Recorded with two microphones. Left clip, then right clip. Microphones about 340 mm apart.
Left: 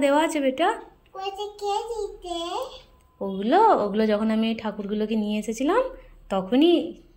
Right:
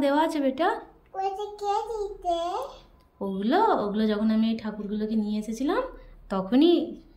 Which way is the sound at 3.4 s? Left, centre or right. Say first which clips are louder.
Left 5 dB; right.